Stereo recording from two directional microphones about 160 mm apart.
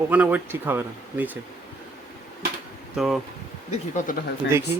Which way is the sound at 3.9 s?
55° left (ahead or behind).